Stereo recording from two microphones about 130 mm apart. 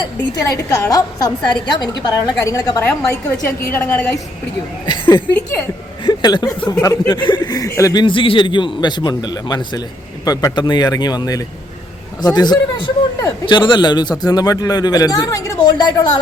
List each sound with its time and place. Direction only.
0.4 s a woman's voice: 25° left (ahead or behind)
4.9 s chuckle: 35° left (ahead or behind)
6.1 s speech: 35° left (ahead or behind)
6.7 s a woman's voice: 20° left (ahead or behind)
7.1 s a man's voice: 35° left (ahead or behind)
8.0 s a man's voice: 40° left (ahead or behind)